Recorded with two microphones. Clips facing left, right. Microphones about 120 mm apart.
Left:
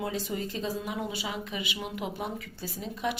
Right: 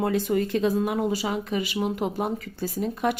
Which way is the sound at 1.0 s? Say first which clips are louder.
Right 8 dB; 40° right (ahead or behind).